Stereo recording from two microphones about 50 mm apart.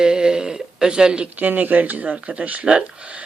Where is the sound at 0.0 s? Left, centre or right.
Centre.